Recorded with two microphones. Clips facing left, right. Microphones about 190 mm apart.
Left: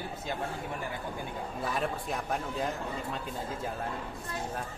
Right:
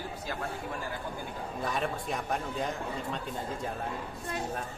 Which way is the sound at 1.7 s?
Centre (ahead or behind).